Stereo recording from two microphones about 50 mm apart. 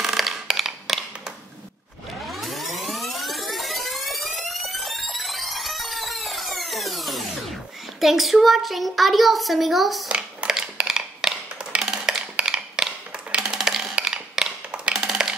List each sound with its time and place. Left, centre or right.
0.0 s a sound: centre
2.2 s music: centre
8.0 s a child's voice: centre
10.0 s hands: centre
10.8 s music: centre
11.8 s a sound: centre
13.4 s wood block: centre
13.9 s music: centre